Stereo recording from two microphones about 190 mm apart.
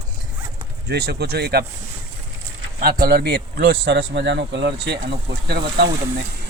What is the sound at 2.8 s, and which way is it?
Speech, 55° right (ahead or behind).